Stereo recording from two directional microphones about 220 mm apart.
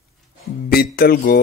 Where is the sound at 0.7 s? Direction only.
45° left (ahead or behind).